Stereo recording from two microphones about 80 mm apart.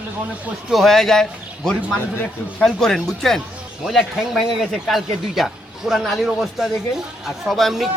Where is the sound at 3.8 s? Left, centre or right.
Centre.